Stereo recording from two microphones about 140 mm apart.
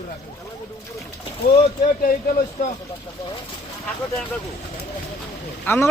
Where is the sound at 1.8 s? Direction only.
90° left.